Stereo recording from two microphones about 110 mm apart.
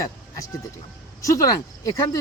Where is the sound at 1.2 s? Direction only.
30° left (ahead or behind).